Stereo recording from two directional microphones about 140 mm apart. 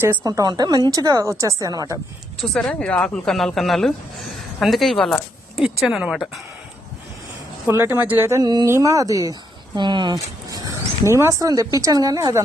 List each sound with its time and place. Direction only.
0.0 s speech: 15° right (ahead or behind)
0.3 s a woman's voice: 25° right (ahead or behind)
2.4 s speech: 5° left (ahead or behind)
7.7 s speech: 15° right (ahead or behind)
8.4 s a woman's voice: 30° right (ahead or behind)
11.0 s a woman's voice: 20° right (ahead or behind)